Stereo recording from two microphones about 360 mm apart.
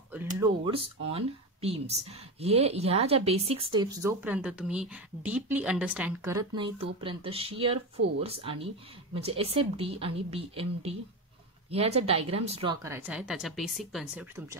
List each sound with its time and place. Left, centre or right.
0.4 s speech: centre